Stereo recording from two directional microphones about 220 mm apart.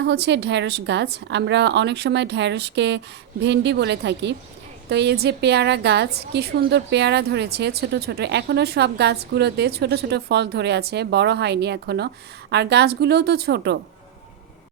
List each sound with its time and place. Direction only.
0.0 s a woman's voice: 50° right (ahead or behind)